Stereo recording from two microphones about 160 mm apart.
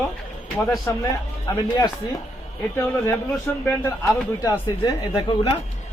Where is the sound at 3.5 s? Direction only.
10° left (ahead or behind).